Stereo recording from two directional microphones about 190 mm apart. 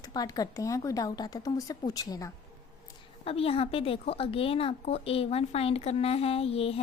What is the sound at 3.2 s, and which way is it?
Speech, 30° left (ahead or behind).